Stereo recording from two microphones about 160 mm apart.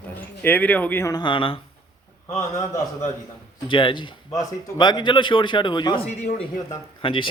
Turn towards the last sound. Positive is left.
turn(degrees=30)  # may be behind; listen again after turning